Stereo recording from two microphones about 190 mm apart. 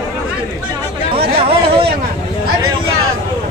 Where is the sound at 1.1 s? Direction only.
30° right (ahead or behind).